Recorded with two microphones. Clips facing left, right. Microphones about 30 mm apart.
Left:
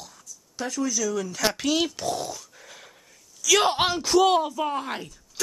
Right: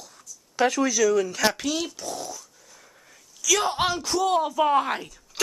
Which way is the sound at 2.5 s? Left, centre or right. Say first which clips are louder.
Left 6 dB; left.